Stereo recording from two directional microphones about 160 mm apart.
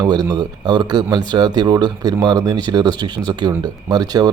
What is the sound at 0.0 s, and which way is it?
Speech, 25° right (ahead or behind).